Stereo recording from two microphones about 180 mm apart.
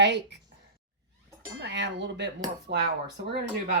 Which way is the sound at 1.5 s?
75° right (ahead or behind).